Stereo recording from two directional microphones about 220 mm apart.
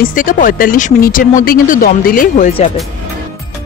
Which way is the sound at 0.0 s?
40° left (ahead or behind).